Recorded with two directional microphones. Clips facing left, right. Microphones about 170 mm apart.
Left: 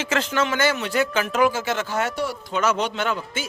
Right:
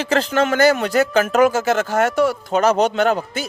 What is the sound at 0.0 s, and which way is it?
Speech, 35° right (ahead or behind).